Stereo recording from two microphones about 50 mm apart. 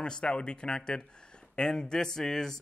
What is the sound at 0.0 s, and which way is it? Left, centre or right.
A man's voice, centre.